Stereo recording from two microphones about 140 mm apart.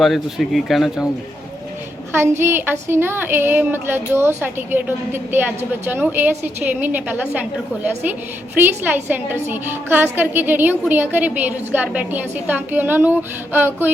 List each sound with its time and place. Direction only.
0.0 s speech: centre (ahead or behind)
2.1 s a woman's voice: 15° right (ahead or behind)
8.5 s a woman's voice: 15° right (ahead or behind)